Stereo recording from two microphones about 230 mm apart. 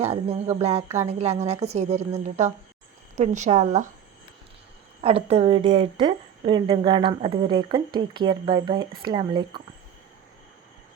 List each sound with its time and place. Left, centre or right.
0.0 s a woman's voice: right
5.0 s a woman's voice: right